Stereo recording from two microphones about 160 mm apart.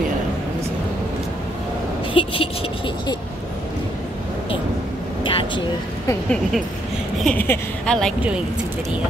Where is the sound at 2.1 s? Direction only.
35° left (ahead or behind).